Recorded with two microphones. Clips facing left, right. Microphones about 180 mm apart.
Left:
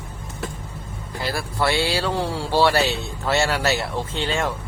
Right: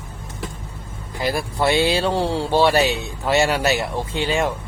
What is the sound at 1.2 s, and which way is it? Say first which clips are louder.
Speech: right 3 dB; 20° right (ahead or behind).